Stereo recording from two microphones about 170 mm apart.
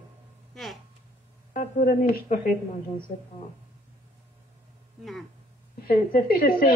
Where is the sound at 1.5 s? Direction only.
55° left (ahead or behind).